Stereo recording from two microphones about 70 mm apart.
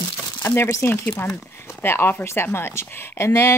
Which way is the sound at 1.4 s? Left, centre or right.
Left.